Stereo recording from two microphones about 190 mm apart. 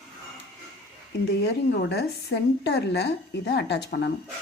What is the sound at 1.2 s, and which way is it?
A woman's voice, 60° left (ahead or behind).